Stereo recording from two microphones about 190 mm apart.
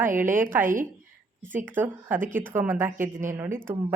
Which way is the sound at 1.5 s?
10° right (ahead or behind).